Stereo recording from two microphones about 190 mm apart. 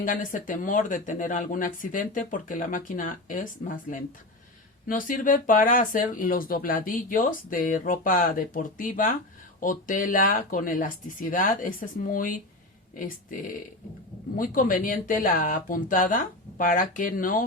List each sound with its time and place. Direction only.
0.0 s speech: 45° left (ahead or behind)